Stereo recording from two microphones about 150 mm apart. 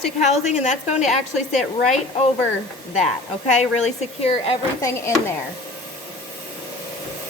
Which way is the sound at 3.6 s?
50° left (ahead or behind).